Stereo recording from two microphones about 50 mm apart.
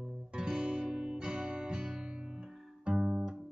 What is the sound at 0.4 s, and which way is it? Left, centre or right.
Music, centre.